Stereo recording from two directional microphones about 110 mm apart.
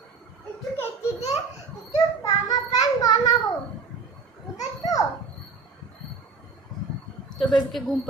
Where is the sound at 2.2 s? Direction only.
35° left (ahead or behind).